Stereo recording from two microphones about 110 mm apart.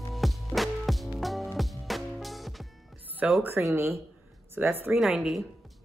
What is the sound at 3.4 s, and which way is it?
Speech, 20° right (ahead or behind).